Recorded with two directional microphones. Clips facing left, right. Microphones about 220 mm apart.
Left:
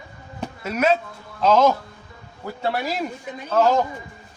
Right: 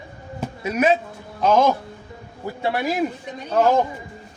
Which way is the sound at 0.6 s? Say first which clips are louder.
Right 1 dB; 15° right (ahead or behind).